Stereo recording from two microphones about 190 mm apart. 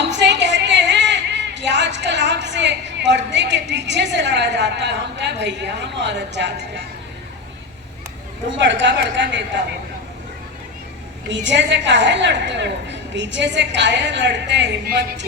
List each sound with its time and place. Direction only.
0.1 s a sound: 65° right (ahead or behind)
8.4 s a woman's voice: 70° right (ahead or behind)
11.3 s a woman's voice: 70° right (ahead or behind)